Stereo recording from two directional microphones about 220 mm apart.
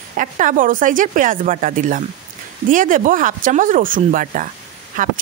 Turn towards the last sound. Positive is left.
turn(degrees=-35)  # may be behind; listen again after turning